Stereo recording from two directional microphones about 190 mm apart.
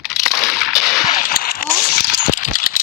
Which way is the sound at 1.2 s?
50° left (ahead or behind).